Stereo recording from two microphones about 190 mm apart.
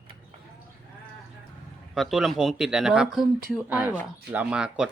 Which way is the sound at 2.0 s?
Centre (ahead or behind).